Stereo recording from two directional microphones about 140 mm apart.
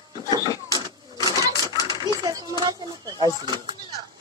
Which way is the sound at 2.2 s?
30° right (ahead or behind).